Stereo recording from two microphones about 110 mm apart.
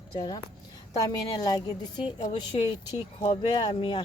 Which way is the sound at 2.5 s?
60° left (ahead or behind).